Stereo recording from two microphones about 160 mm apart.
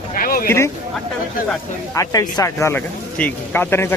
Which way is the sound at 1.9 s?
25° left (ahead or behind).